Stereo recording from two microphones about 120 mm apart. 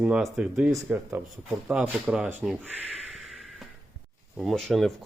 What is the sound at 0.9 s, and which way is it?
Speech, 15° right (ahead or behind).